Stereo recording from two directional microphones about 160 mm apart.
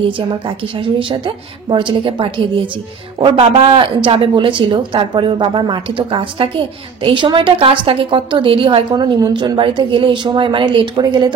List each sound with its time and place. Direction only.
0.0 s speech: 35° right (ahead or behind)